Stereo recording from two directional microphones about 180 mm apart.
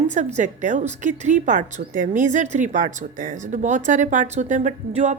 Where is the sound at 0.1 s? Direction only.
40° right (ahead or behind).